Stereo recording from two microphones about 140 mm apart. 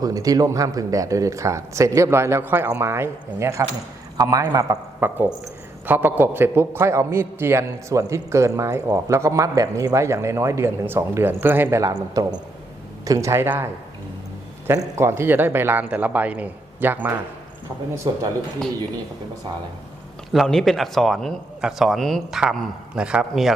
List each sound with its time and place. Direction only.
0.0 s a man's voice: 25° right (ahead or behind)
14.7 s a man's voice: 20° right (ahead or behind)
18.0 s speech: 35° right (ahead or behind)
20.3 s a man's voice: centre (ahead or behind)